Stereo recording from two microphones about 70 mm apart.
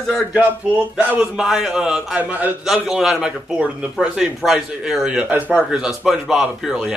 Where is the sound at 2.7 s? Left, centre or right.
Centre.